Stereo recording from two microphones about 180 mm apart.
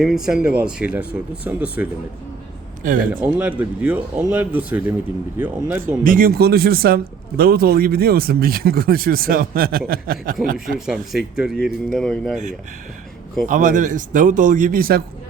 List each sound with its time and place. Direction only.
0.0 s speech: centre (ahead or behind)
3.2 s speech: 5° right (ahead or behind)
6.0 s speech: 50° right (ahead or behind)
10.8 s speech: centre (ahead or behind)
13.5 s speech: 45° right (ahead or behind)